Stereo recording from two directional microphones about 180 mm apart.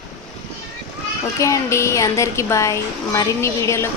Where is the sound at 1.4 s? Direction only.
15° left (ahead or behind).